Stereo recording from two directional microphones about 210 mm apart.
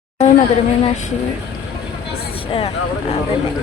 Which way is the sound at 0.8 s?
35° left (ahead or behind).